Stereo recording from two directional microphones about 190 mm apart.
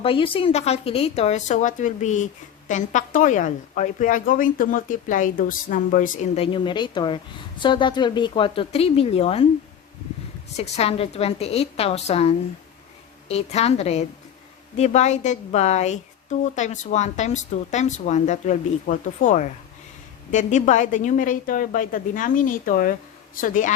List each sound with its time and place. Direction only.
0.0 s a woman's voice: 30° left (ahead or behind)
10.6 s speech: 30° left (ahead or behind)